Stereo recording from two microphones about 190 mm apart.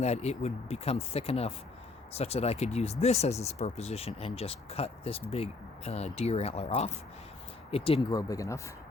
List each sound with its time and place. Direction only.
0.0 s speech: 35° left (ahead or behind)
8.1 s speech: 15° left (ahead or behind)